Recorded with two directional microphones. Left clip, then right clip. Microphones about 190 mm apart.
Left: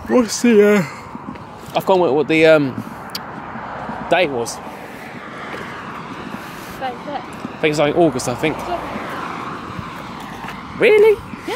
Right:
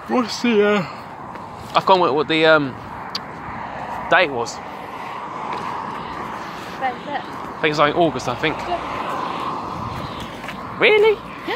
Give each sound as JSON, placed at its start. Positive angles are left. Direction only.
{"t": 0.1, "sound": "speech", "side_deg": 55}
{"t": 2.1, "sound": "speech", "side_deg": 55}
{"t": 4.1, "sound": "speech", "side_deg": 55}
{"t": 7.6, "sound": "speech", "side_deg": 50}
{"t": 8.6, "sound": "speech", "side_deg": 0}
{"t": 9.0, "sound": "vehicle", "side_deg": 15}
{"t": 10.8, "sound": "speech", "side_deg": 45}